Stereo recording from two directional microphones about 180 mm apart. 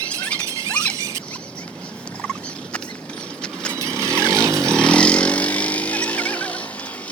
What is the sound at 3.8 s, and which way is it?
Vehicle, 15° right (ahead or behind).